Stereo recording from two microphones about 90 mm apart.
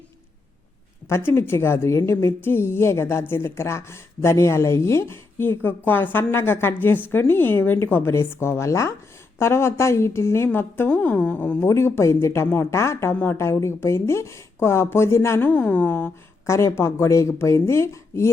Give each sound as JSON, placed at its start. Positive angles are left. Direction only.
{"t": 1.0, "sound": "a woman's voice", "side_deg": 30}
{"t": 11.6, "sound": "a woman's voice", "side_deg": 30}
{"t": 15.4, "sound": "a woman's voice", "side_deg": 20}
{"t": 16.5, "sound": "speech", "side_deg": 30}